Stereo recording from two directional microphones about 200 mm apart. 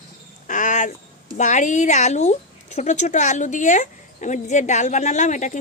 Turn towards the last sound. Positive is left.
turn(degrees=35)  # may be behind; listen again after turning